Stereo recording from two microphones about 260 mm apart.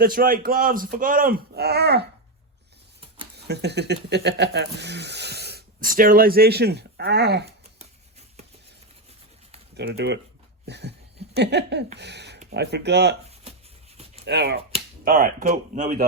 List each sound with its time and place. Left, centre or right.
0.0 s speech: right
3.3 s speech: right
9.7 s speech: right
10.7 s a sound: right
11.9 s speech: right
14.3 s speech: right